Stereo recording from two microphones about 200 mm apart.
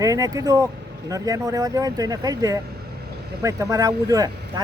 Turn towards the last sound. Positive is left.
turn(degrees=-20)  # may be behind; listen again after turning